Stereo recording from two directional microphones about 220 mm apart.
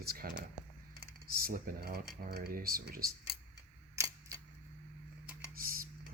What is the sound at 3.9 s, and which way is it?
Camera, 15° right (ahead or behind).